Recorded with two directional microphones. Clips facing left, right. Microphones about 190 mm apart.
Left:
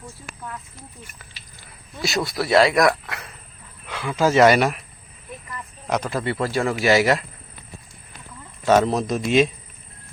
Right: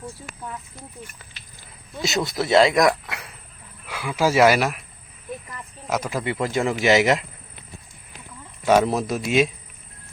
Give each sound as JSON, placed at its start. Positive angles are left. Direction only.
{"t": 1.6, "sound": "speech", "side_deg": -20}
{"t": 5.9, "sound": "a man's voice", "side_deg": -10}
{"t": 8.6, "sound": "a man's voice", "side_deg": -10}